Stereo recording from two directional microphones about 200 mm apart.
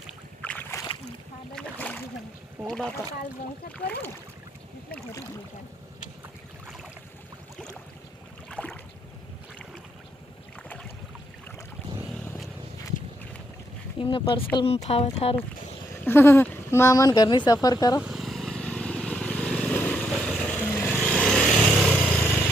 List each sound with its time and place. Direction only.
0.4 s boat: 10° left (ahead or behind)
2.6 s speech: 5° left (ahead or behind)
8.4 s boat: 5° left (ahead or behind)
12.1 s vehicle: 10° left (ahead or behind)
14.0 s speech: 25° left (ahead or behind)
16.0 s speech: 10° left (ahead or behind)
18.0 s vehicle: centre (ahead or behind)